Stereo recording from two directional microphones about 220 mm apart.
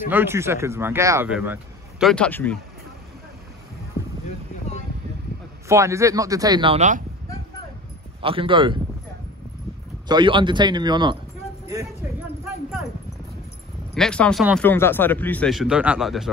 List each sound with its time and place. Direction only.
0.1 s speech: 10° right (ahead or behind); by 2.5 s 5° left (ahead or behind)
5.7 s speech: 15° right (ahead or behind); by 7.0 s 30° right (ahead or behind)
8.2 s speech: 25° right (ahead or behind)
10.0 s speech: 20° right (ahead or behind)
11.6 s a sound: 15° right (ahead or behind)
13.9 s speech: 5° left (ahead or behind)